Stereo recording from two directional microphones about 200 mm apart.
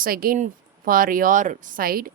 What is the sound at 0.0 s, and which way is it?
A woman's voice, 45° right (ahead or behind).